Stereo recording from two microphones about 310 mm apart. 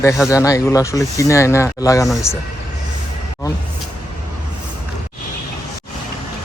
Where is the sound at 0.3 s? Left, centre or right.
Centre.